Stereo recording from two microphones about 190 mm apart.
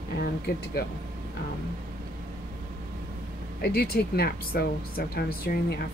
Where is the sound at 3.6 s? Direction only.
55° left (ahead or behind).